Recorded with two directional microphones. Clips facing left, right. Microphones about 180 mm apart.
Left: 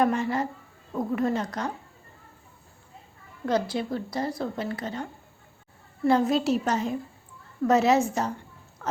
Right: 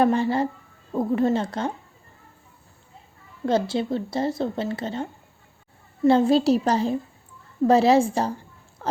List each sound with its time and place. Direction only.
0.0 s speech: 30° right (ahead or behind)
3.4 s a woman's voice: 25° right (ahead or behind)